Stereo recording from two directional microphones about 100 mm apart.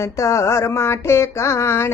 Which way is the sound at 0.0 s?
30° left (ahead or behind).